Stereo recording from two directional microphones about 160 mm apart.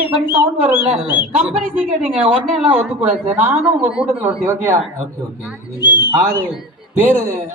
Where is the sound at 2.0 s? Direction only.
35° right (ahead or behind).